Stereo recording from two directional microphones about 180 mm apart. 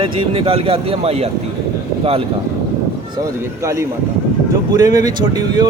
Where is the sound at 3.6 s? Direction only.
15° right (ahead or behind).